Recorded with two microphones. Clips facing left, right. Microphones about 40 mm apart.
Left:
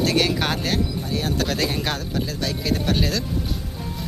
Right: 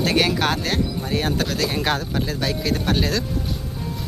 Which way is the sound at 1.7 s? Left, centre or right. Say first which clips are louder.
Right 4 dB; right.